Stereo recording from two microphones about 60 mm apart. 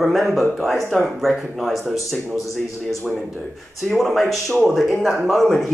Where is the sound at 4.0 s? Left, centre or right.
Centre.